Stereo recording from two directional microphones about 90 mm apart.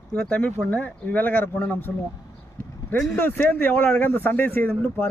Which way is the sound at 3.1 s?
20° left (ahead or behind).